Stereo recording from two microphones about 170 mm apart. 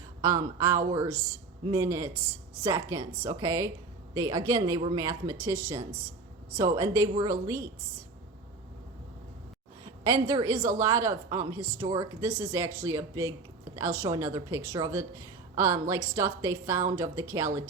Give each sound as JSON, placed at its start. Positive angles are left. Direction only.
{"t": 0.2, "sound": "speech", "side_deg": -20}
{"t": 10.0, "sound": "a woman's voice", "side_deg": -20}